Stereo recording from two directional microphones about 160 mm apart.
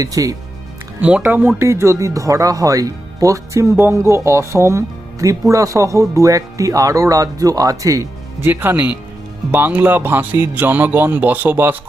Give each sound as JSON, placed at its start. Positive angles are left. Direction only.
{"t": 0.0, "sound": "speech", "side_deg": -20}
{"t": 1.0, "sound": "speech", "side_deg": -10}